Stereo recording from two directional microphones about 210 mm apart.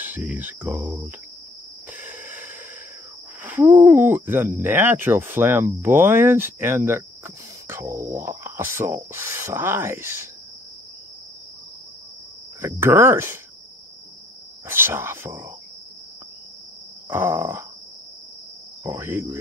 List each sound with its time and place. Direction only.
0.0 s speech: 10° right (ahead or behind)
1.9 s wheeze: 10° right (ahead or behind)
3.4 s speech: 10° right (ahead or behind)
12.8 s speech: 10° right (ahead or behind)
14.7 s speech: 10° right (ahead or behind)
17.1 s speech: 10° right (ahead or behind)
18.9 s speech: 10° right (ahead or behind)